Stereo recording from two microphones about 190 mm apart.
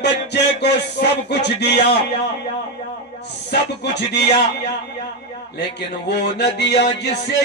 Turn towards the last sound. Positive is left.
turn(degrees=65)  # may be behind; listen again after turning